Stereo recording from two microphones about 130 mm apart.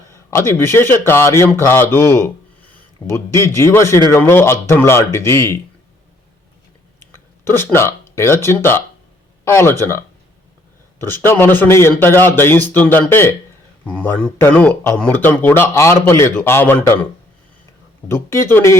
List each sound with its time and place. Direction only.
0.1 s a man's voice: 20° left (ahead or behind)
7.0 s speech: 15° left (ahead or behind)
11.0 s speech: 20° left (ahead or behind)
18.1 s a man's voice: 20° left (ahead or behind)